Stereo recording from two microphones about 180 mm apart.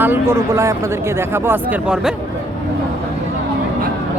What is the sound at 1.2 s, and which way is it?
Speech, 15° right (ahead or behind).